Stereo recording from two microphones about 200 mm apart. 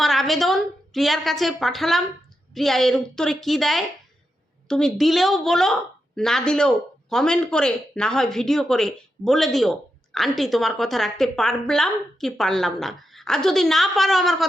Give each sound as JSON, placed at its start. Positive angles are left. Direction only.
{"t": 0.0, "sound": "a woman's voice", "side_deg": 0}